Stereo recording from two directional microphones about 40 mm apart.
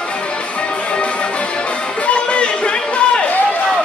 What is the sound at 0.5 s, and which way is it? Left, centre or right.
Music, left.